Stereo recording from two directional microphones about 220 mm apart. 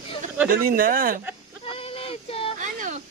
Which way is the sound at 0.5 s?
40° right (ahead or behind).